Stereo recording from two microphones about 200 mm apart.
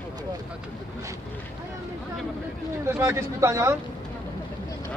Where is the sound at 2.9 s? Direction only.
15° right (ahead or behind).